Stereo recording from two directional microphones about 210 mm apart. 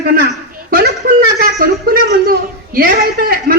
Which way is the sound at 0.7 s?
45° right (ahead or behind).